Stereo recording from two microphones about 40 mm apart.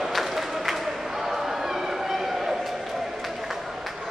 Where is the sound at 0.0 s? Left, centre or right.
Centre.